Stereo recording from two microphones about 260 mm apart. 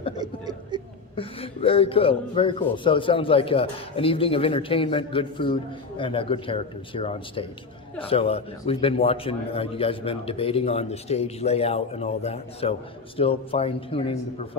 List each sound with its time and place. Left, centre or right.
0.2 s chuckle: centre
1.1 s a man's voice: left